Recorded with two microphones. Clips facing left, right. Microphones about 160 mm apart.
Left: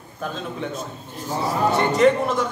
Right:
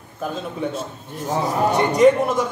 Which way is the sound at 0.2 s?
10° right (ahead or behind).